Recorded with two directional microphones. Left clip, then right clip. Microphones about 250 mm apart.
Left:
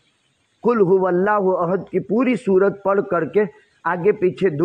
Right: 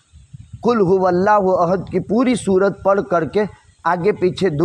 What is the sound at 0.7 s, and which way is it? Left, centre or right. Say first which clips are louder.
A man's voice: right 1 dB; right.